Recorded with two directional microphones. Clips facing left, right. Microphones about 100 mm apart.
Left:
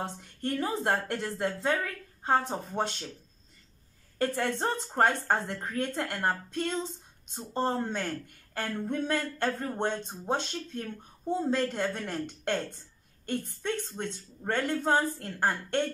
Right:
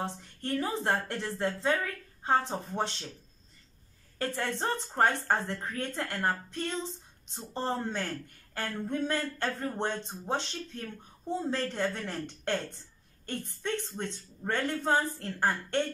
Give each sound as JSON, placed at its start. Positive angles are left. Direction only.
{"t": 0.0, "sound": "speech", "side_deg": 15}
{"t": 4.2, "sound": "speech", "side_deg": 20}